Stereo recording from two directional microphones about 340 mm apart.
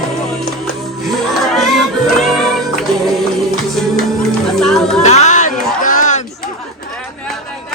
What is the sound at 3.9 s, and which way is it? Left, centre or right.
Music, centre.